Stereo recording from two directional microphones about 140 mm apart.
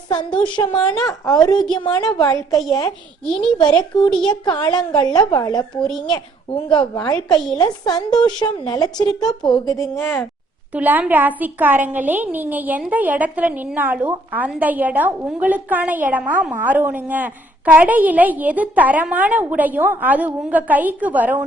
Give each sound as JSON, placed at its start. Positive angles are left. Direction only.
{"t": 0.1, "sound": "a woman's voice", "side_deg": 35}
{"t": 0.8, "sound": "a woman's voice", "side_deg": 5}
{"t": 1.7, "sound": "a woman's voice", "side_deg": 30}
{"t": 3.2, "sound": "a woman's voice", "side_deg": 5}
{"t": 3.6, "sound": "a woman's voice", "side_deg": 30}
{"t": 7.3, "sound": "a woman's voice", "side_deg": 5}
{"t": 7.6, "sound": "a woman's voice", "side_deg": 30}
{"t": 10.0, "sound": "speech", "side_deg": 5}
{"t": 10.8, "sound": "a woman's voice", "side_deg": -10}